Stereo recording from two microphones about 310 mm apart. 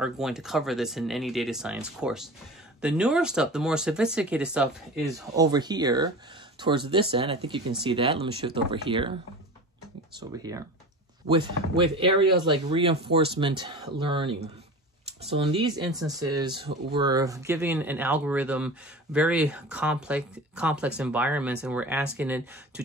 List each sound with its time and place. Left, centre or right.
0.0 s speech: centre
11.2 s speech: centre